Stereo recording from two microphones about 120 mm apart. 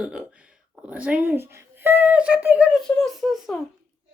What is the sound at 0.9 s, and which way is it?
Speech, 10° right (ahead or behind).